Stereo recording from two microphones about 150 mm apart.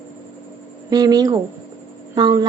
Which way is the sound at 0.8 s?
25° right (ahead or behind).